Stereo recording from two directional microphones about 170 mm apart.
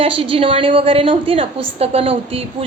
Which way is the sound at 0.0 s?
35° right (ahead or behind).